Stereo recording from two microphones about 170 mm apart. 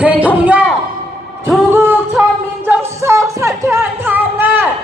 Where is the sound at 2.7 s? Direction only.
15° right (ahead or behind).